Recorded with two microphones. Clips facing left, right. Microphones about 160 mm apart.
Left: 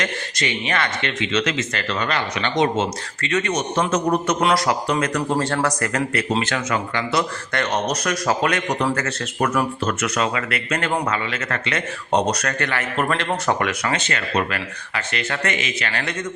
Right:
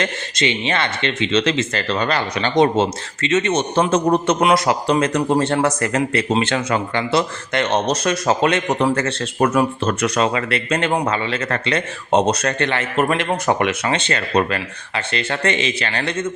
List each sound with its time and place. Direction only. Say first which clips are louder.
0.0 s speech: right 4 dB; 25° right (ahead or behind)
3.2 s speech: right 4 dB; 20° right (ahead or behind)